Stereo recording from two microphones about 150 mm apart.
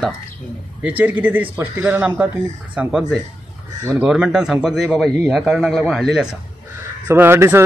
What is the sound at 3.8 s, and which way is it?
Speech, 20° right (ahead or behind).